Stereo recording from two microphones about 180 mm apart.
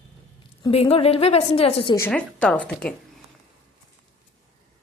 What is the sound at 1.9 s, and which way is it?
Speech, 10° left (ahead or behind).